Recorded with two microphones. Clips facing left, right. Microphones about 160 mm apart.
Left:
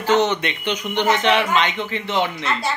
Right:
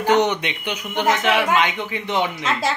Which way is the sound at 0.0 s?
15° right (ahead or behind).